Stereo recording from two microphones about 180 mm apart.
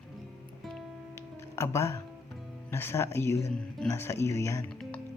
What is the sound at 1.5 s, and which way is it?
Speech, 15° left (ahead or behind).